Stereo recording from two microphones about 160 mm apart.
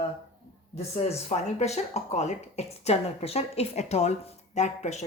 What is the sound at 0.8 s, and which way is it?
Speech, 40° left (ahead or behind).